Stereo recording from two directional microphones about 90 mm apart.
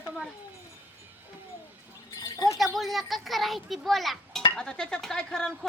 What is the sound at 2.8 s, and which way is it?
A child's voice, centre (ahead or behind).